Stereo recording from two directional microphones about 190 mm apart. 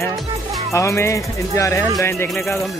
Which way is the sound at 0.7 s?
15° left (ahead or behind).